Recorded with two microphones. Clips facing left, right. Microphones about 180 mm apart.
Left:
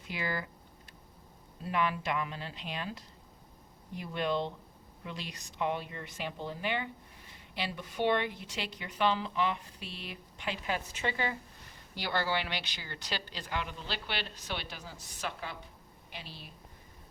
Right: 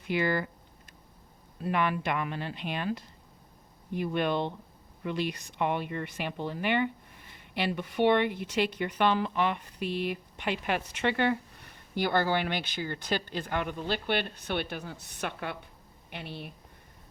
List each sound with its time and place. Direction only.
0.1 s speech: 60° right (ahead or behind)
1.6 s speech: 60° right (ahead or behind)